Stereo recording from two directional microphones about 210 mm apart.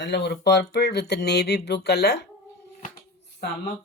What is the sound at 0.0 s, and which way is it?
Speech, 55° left (ahead or behind).